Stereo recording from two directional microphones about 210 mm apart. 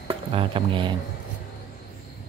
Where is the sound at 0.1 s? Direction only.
25° right (ahead or behind).